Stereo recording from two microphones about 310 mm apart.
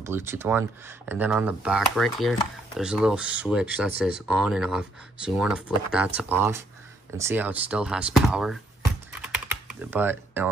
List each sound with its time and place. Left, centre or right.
0.0 s speech: centre
9.7 s speech: centre